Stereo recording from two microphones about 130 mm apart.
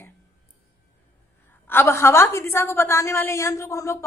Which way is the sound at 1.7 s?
20° left (ahead or behind).